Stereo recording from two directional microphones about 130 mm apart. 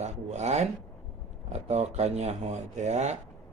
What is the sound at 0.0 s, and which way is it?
Rub, 60° right (ahead or behind).